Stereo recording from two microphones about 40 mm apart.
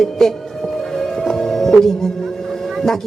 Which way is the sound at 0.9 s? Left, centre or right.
Centre.